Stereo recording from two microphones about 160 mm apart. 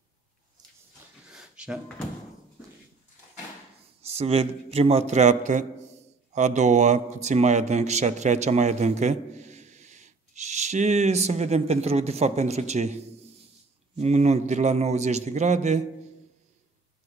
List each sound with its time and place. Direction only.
1.3 s a sound: 5° right (ahead or behind)
4.0 s a man's voice: 40° right (ahead or behind)
13.9 s speech: 45° right (ahead or behind)